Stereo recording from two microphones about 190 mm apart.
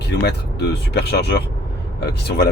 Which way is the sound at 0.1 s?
60° left (ahead or behind).